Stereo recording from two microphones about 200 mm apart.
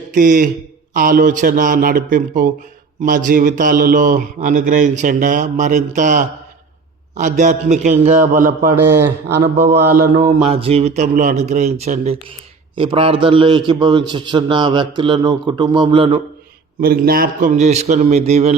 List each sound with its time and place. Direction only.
0.1 s a man's voice: 40° right (ahead or behind)
3.0 s mantra: 40° right (ahead or behind)
8.7 s speech: 15° right (ahead or behind)
10.2 s mantra: 30° right (ahead or behind)
12.7 s a man's voice: 25° right (ahead or behind)
16.8 s mantra: 50° right (ahead or behind)